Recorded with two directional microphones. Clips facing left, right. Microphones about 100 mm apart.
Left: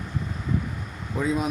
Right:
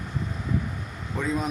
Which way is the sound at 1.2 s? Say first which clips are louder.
Left 3 dB; 5° left (ahead or behind).